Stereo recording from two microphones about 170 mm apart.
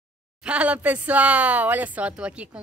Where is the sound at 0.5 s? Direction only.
5° right (ahead or behind).